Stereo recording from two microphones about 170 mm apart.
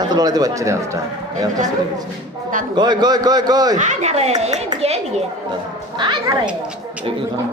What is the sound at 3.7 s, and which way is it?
A man's voice, 45° right (ahead or behind).